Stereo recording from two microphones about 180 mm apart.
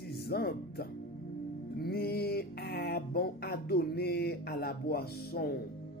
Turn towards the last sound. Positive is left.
turn(degrees=55)  # may be behind; listen again after turning